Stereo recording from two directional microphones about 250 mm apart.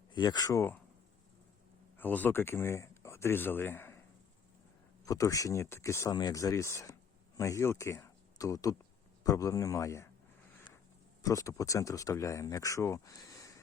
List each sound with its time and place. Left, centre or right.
0.1 s speech: centre
2.0 s speech: centre
5.0 s speech: centre
10.7 s a sound: centre
11.2 s speech: centre